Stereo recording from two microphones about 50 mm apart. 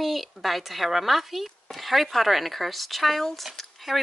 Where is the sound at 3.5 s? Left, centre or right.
Centre.